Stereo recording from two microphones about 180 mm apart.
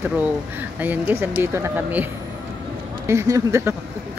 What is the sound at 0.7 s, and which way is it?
Speech, 10° right (ahead or behind).